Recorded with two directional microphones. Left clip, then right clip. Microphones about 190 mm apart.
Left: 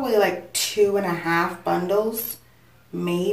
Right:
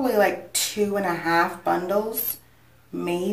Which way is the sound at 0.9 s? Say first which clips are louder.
Even; 15° right (ahead or behind).